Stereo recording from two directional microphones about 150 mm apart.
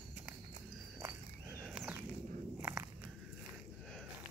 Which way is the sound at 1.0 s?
15° right (ahead or behind).